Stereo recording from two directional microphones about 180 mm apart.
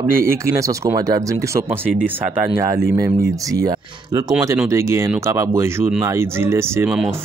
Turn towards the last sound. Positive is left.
turn(degrees=-10)  # may be behind; listen again after turning